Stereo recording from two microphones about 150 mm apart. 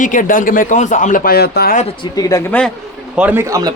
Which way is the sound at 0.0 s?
60° left (ahead or behind).